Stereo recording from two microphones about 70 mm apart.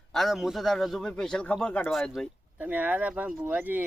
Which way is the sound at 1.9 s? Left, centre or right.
Centre.